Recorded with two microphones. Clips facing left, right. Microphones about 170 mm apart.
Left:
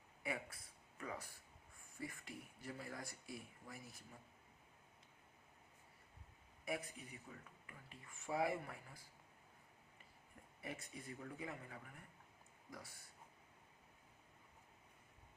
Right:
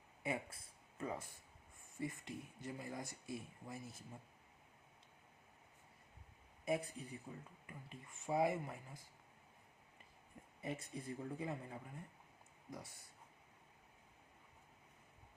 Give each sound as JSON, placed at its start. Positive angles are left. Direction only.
{"t": 0.2, "sound": "speech", "side_deg": -25}
{"t": 6.7, "sound": "speech", "side_deg": -30}
{"t": 10.6, "sound": "speech", "side_deg": -25}